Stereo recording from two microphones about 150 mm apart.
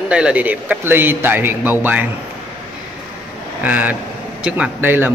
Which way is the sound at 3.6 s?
10° right (ahead or behind).